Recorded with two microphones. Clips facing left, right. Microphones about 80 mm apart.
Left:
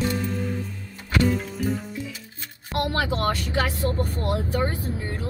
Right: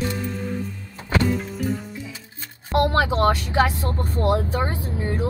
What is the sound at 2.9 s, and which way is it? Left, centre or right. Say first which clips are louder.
Vehicle: right 5 dB; right.